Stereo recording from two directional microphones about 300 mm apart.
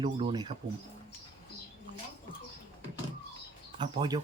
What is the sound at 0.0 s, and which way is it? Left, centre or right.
Speech, centre.